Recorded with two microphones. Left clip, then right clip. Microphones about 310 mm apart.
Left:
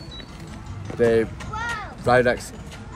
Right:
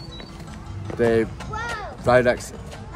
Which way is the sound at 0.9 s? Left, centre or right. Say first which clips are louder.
Left 1 dB; centre.